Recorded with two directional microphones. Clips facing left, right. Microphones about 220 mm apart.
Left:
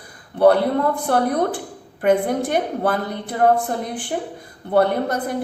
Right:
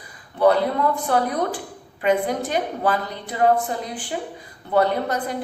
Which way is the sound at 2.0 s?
55° left (ahead or behind).